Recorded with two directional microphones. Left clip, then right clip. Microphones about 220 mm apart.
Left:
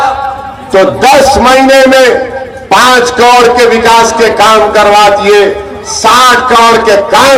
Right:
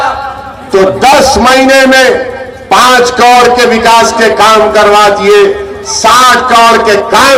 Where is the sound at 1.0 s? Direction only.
25° right (ahead or behind).